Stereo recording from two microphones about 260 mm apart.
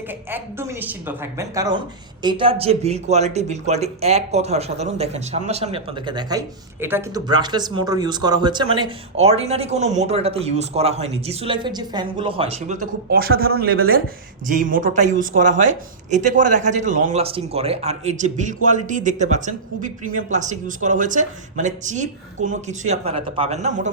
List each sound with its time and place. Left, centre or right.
0.3 s speech: centre; by 23.9 s right